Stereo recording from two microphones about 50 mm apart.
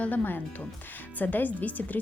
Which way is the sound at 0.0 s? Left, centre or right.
Left.